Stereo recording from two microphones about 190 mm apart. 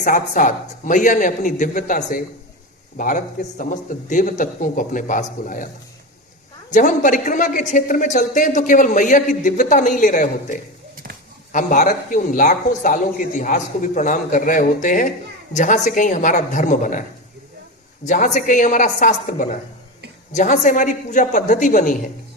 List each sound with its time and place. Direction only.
0.0 s a man's voice: 45° left (ahead or behind)
6.7 s speech: 40° left (ahead or behind)
10.9 s a sound: 50° right (ahead or behind)
11.5 s a man's voice: 45° left (ahead or behind)
18.0 s speech: 40° left (ahead or behind)